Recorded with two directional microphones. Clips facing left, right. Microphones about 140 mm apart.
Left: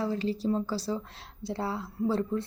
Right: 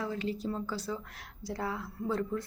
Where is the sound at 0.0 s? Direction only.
30° left (ahead or behind).